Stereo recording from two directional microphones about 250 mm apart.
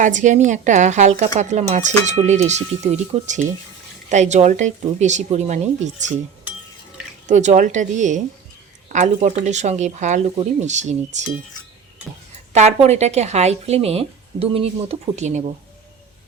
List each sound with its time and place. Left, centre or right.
0.0 s speech: right
7.3 s speech: right
12.5 s speech: right